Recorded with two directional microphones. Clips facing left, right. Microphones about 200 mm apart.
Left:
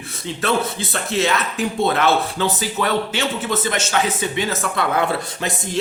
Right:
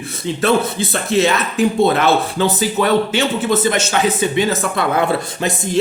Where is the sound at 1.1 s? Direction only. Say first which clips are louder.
Right 5 dB; 15° right (ahead or behind).